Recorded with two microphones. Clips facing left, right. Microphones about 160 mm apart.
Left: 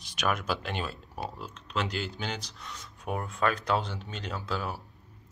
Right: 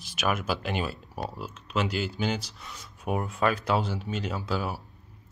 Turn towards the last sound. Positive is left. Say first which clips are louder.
# right 3 dB
turn(degrees=-5)  # may be behind; listen again after turning